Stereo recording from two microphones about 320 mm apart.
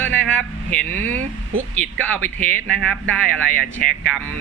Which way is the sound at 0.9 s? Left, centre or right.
Centre.